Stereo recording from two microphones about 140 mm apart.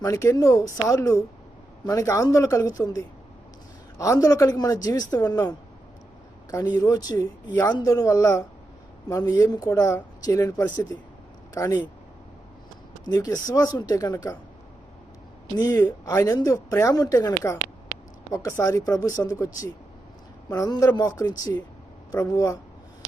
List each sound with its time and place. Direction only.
0.0 s speech: 20° left (ahead or behind)
6.7 s speech: 25° left (ahead or behind)
13.1 s speech: 25° left (ahead or behind)
15.5 s speech: 25° left (ahead or behind)